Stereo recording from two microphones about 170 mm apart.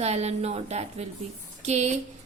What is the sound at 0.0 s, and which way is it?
A woman's voice, 40° right (ahead or behind).